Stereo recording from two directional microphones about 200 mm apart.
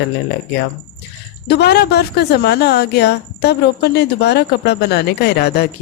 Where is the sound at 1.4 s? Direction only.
55° left (ahead or behind).